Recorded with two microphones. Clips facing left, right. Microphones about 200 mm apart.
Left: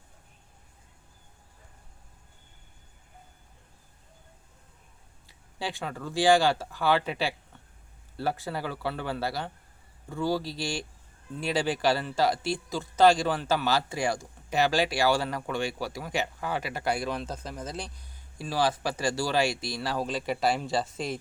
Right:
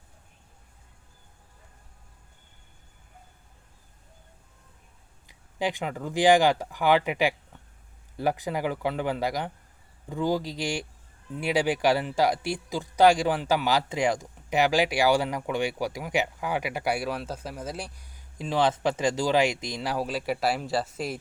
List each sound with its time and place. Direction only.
5.2 s speech: 15° right (ahead or behind)